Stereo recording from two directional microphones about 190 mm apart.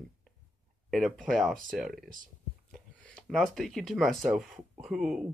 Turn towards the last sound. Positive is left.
turn(degrees=-5)  # may be behind; listen again after turning